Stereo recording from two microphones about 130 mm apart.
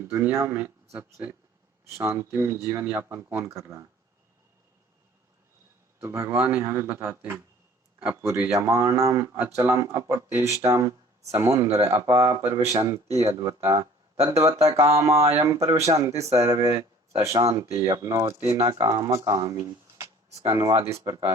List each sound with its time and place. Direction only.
0.0 s speech: 15° right (ahead or behind)
6.0 s speech: 20° right (ahead or behind)
19.5 s a sound: 25° right (ahead or behind)
20.5 s speech: 30° right (ahead or behind)